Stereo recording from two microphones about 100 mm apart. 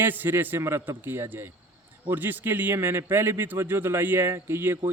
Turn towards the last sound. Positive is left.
turn(degrees=-25)  # may be behind; listen again after turning